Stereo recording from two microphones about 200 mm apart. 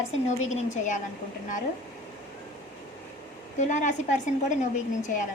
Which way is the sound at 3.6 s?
40° left (ahead or behind).